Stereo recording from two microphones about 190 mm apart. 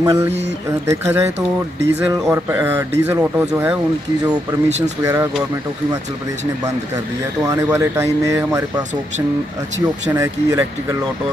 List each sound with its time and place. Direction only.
0.0 s speech: 20° right (ahead or behind)
4.6 s speech: 35° right (ahead or behind)
5.0 s speech: 15° right (ahead or behind)
7.4 s speech: 15° right (ahead or behind)